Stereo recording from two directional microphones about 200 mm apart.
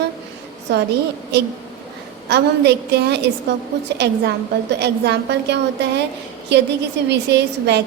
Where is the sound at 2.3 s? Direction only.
55° right (ahead or behind).